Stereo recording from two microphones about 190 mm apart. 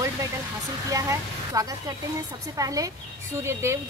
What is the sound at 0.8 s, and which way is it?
A woman's voice, 15° right (ahead or behind).